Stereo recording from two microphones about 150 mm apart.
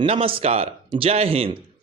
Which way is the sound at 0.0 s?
40° right (ahead or behind).